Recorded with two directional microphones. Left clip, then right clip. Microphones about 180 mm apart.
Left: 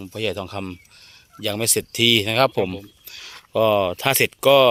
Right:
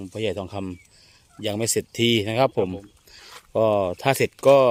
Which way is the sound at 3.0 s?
15° right (ahead or behind).